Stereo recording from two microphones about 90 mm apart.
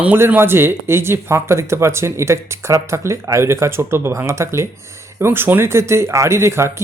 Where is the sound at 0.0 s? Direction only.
20° right (ahead or behind).